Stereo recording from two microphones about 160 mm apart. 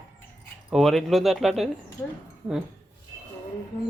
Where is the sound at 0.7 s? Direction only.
Centre (ahead or behind).